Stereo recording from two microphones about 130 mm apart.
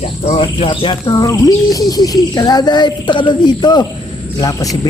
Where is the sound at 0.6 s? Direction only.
40° left (ahead or behind).